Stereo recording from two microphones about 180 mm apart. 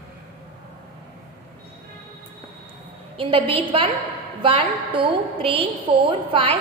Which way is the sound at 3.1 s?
30° right (ahead or behind).